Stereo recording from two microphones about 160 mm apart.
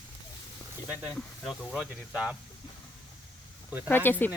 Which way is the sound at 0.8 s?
5° right (ahead or behind).